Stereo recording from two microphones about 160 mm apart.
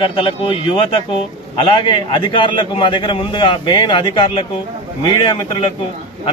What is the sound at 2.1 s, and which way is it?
A man's voice, 30° left (ahead or behind).